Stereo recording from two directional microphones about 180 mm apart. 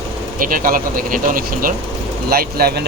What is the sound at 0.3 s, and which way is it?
Speech, 50° right (ahead or behind).